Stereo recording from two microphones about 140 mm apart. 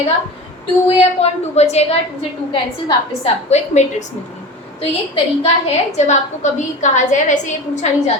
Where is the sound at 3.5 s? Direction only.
50° left (ahead or behind).